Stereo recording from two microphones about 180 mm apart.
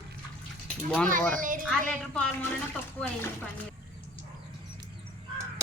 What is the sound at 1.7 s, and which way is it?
Speech, 5° left (ahead or behind).